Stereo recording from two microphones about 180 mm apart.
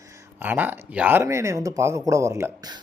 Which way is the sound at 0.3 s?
10° right (ahead or behind).